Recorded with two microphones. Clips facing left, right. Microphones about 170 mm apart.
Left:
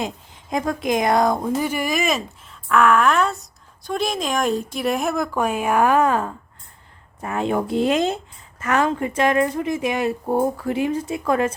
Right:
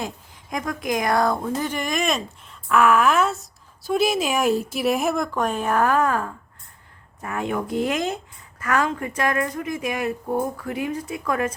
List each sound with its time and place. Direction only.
0.5 s a woman's voice: 30° left (ahead or behind)